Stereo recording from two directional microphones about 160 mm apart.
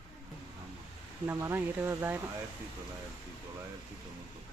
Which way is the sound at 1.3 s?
15° right (ahead or behind).